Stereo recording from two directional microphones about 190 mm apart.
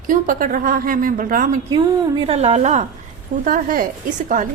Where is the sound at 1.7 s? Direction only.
25° right (ahead or behind).